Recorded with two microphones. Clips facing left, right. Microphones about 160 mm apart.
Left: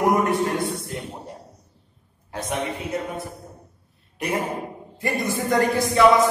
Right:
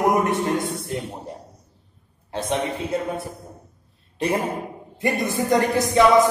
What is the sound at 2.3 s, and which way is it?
Speech, 30° right (ahead or behind).